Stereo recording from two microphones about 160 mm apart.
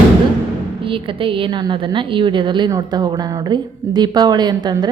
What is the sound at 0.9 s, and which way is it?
A woman's voice, 35° right (ahead or behind).